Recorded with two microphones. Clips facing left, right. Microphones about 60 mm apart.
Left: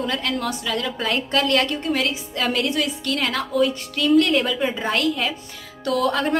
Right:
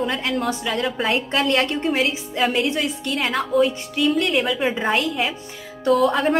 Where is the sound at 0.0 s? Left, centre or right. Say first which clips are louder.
Right 2 dB; centre.